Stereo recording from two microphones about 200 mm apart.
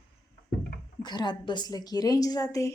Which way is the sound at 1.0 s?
20° left (ahead or behind).